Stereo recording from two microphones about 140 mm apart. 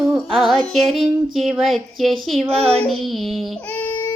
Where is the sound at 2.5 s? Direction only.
45° right (ahead or behind).